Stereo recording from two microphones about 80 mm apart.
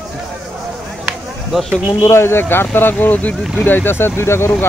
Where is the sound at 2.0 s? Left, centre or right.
Left.